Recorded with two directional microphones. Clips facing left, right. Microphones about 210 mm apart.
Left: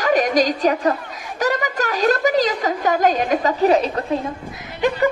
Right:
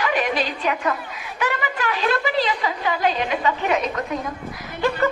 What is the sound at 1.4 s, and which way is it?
A woman's voice, 40° left (ahead or behind).